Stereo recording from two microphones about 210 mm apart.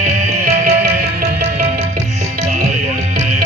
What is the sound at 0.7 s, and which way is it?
Music, 45° right (ahead or behind).